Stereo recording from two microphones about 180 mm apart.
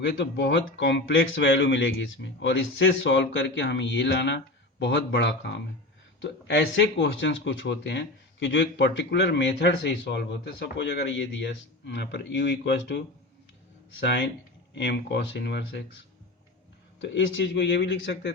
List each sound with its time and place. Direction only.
0.3 s speech: 80° left
14.0 s speech: 75° left (ahead or behind)
17.0 s speech: 85° left